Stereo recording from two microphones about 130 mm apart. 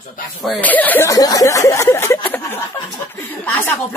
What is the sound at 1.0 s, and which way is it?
Speech, 25° left (ahead or behind).